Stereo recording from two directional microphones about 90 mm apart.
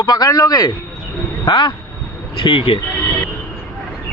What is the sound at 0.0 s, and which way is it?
Speech, 50° left (ahead or behind).